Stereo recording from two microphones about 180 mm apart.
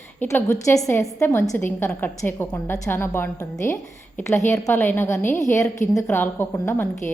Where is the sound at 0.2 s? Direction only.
15° left (ahead or behind).